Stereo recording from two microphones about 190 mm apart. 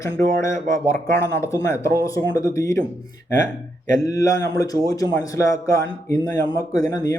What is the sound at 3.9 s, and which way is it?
Speech, 15° left (ahead or behind).